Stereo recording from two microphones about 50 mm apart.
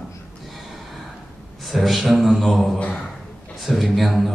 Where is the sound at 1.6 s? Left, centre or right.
Centre.